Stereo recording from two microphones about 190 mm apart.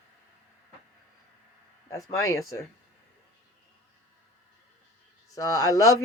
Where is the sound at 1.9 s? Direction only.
15° left (ahead or behind).